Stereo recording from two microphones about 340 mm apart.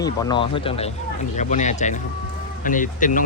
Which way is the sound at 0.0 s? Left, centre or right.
Centre.